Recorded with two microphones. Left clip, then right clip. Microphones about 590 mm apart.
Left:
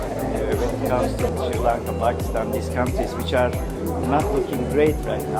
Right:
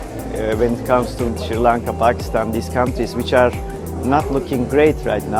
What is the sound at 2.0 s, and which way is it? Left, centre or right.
Speech, right.